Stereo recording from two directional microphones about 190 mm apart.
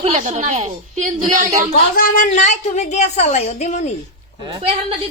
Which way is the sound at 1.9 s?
45° left (ahead or behind).